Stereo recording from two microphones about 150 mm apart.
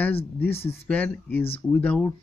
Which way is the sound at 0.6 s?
40° left (ahead or behind).